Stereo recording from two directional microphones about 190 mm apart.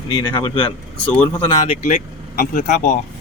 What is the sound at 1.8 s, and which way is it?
Speech, 35° left (ahead or behind).